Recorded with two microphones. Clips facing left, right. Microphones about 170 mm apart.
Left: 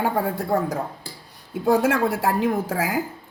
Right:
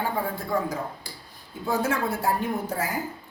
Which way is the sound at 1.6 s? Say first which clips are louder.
Left 7 dB; 90° left.